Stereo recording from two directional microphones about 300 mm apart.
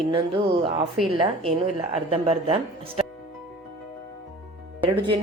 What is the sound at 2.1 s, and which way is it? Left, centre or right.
Speech, centre.